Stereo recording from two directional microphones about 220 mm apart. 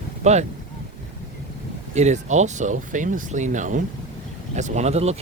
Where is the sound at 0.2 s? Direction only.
30° right (ahead or behind).